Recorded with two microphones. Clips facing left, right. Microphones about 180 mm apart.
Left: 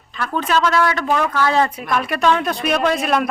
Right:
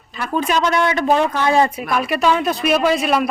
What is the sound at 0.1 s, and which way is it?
A woman's voice, 10° right (ahead or behind).